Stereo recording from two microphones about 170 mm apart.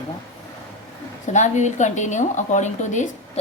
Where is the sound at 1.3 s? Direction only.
45° left (ahead or behind).